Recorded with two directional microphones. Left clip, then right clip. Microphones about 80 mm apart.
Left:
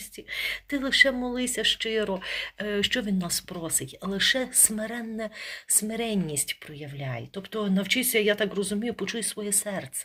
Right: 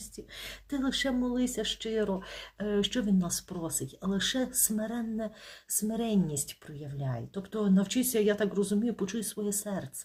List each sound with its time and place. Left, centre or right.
0.3 s speech: right